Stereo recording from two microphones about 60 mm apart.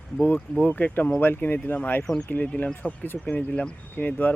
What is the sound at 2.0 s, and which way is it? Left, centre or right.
Speech, centre.